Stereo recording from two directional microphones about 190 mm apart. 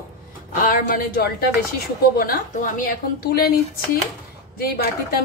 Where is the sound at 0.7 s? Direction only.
50° left (ahead or behind).